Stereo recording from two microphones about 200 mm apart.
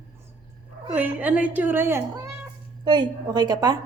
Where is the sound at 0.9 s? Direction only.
10° right (ahead or behind).